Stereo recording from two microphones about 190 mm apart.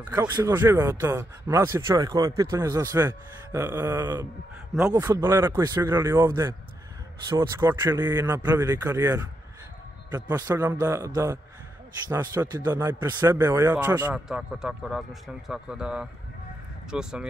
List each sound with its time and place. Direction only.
0.4 s a man's voice: 15° right (ahead or behind)